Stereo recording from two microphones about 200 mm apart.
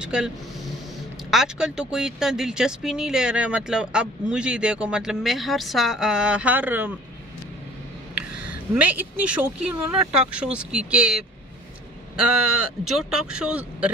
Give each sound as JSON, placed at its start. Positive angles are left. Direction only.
{"t": 0.0, "sound": "speech", "side_deg": -5}
{"t": 1.3, "sound": "speech", "side_deg": 0}
{"t": 8.4, "sound": "speech", "side_deg": -5}
{"t": 12.4, "sound": "speech", "side_deg": -90}
{"t": 13.3, "sound": "speech", "side_deg": -5}